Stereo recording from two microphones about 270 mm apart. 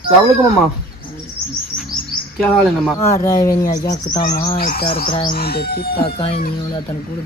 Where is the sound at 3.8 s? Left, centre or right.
Left.